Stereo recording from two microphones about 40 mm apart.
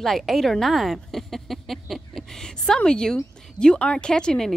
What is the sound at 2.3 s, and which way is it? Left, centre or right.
Speech, centre.